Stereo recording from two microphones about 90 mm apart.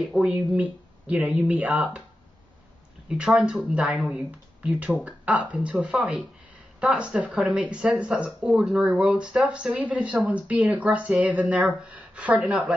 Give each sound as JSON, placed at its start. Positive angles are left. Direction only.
{"t": 0.1, "sound": "speech", "side_deg": -10}
{"t": 3.1, "sound": "speech", "side_deg": -5}